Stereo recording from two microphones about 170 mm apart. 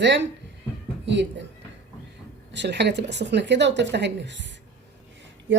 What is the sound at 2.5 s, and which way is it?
Speech, 90° right.